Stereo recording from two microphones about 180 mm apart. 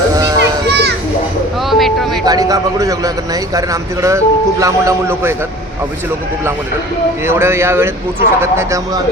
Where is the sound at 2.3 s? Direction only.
20° right (ahead or behind).